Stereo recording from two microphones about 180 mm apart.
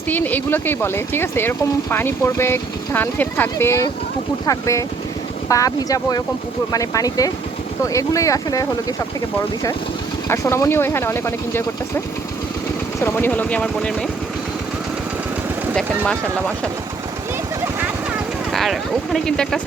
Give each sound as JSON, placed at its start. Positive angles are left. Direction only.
{"t": 0.1, "sound": "speech", "side_deg": 10}
{"t": 10.2, "sound": "speech", "side_deg": 15}
{"t": 13.0, "sound": "speech", "side_deg": 10}
{"t": 18.5, "sound": "speech", "side_deg": 0}